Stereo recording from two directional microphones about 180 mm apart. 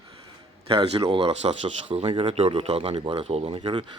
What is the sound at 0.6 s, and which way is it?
Speech, 30° right (ahead or behind).